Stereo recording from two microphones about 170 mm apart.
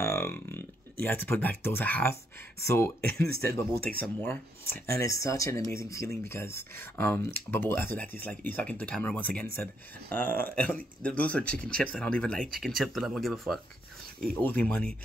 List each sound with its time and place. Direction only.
0.0 s speech: 15° left (ahead or behind)